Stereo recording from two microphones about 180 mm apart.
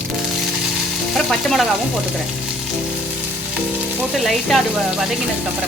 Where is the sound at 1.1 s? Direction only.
Centre (ahead or behind).